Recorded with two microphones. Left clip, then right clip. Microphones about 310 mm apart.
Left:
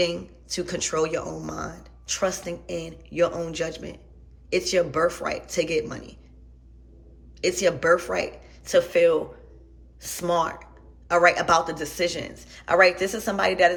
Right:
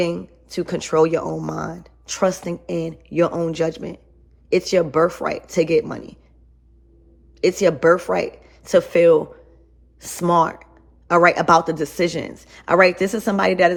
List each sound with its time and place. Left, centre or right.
0.0 s speech: centre
7.4 s speech: centre